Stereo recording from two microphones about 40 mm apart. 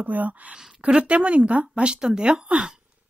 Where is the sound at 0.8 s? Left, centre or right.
Right.